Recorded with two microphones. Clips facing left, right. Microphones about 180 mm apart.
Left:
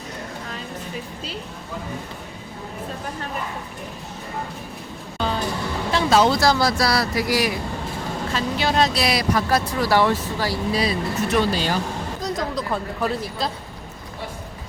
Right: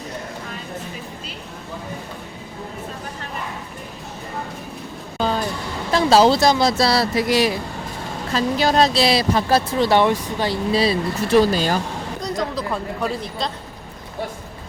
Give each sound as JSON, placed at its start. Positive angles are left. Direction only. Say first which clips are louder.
{"t": 5.9, "sound": "speech", "louder": "right 4 dB", "side_deg": -35}
{"t": 8.3, "sound": "speech", "louder": "right 5 dB", "side_deg": -40}
{"t": 11.5, "sound": "speech", "louder": "right 3 dB", "side_deg": -45}
{"t": 12.2, "sound": "speech", "louder": "right 2 dB", "side_deg": 0}